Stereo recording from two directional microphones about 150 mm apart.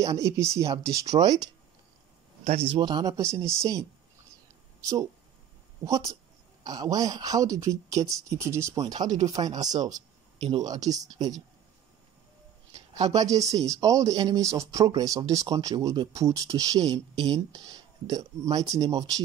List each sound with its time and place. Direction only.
0.0 s speech: 20° right (ahead or behind)
2.4 s speech: 45° right (ahead or behind)
2.8 s speech: 25° right (ahead or behind)
5.9 s speech: 20° right (ahead or behind)
13.1 s speech: 25° right (ahead or behind)